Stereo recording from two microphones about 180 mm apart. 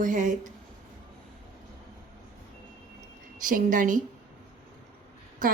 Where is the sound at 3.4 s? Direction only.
50° right (ahead or behind).